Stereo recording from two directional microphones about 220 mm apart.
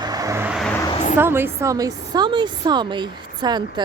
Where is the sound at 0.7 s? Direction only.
15° left (ahead or behind).